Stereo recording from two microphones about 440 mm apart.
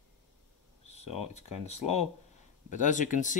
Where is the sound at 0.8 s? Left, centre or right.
Centre.